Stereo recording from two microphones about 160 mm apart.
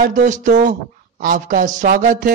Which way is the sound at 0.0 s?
50° right (ahead or behind).